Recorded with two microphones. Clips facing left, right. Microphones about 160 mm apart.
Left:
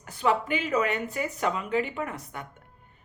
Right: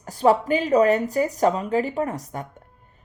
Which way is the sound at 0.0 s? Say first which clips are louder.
Right 7 dB; 40° right (ahead or behind).